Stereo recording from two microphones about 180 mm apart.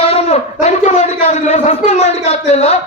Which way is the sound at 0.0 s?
35° left (ahead or behind).